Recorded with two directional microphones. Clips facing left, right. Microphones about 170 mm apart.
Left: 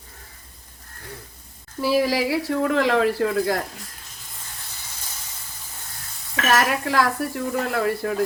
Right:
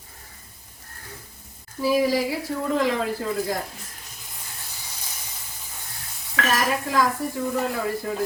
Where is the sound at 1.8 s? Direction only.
80° left.